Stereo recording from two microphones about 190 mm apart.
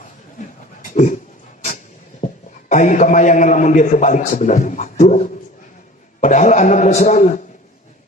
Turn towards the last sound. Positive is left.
turn(degrees=40)  # may be behind; listen again after turning